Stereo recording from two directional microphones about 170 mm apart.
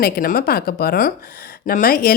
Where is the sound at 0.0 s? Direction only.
60° left (ahead or behind).